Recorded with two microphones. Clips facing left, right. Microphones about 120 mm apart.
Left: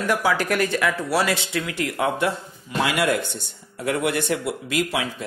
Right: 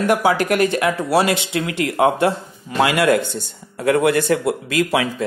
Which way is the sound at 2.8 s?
90° right.